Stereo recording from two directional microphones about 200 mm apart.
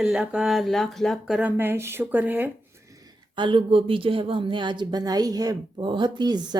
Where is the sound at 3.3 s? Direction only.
25° right (ahead or behind).